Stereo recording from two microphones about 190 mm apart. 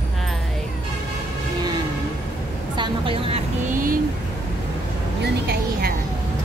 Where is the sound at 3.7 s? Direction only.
45° right (ahead or behind).